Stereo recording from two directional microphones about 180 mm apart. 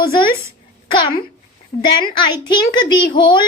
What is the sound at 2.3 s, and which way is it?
A child's voice, 25° left (ahead or behind).